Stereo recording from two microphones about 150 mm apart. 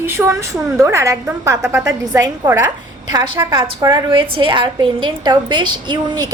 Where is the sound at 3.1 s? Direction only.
30° right (ahead or behind).